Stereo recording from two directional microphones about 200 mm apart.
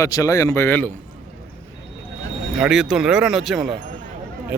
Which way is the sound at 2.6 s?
Centre (ahead or behind).